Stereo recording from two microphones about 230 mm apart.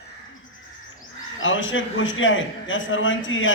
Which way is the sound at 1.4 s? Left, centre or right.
Left.